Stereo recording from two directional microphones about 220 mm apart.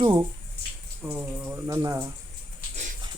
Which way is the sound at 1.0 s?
10° right (ahead or behind).